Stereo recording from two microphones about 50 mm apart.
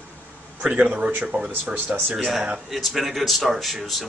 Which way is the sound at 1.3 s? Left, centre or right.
Right.